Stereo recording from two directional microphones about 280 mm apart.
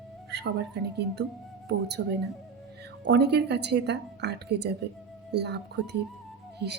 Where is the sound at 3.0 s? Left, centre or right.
Right.